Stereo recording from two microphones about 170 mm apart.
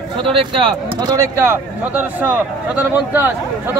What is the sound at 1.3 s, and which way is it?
Speech, 10° right (ahead or behind).